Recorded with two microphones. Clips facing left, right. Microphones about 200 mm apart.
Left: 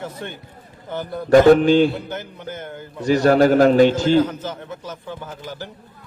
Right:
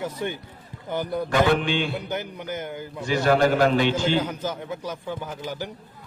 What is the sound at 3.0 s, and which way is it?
A man's voice, 40° left (ahead or behind).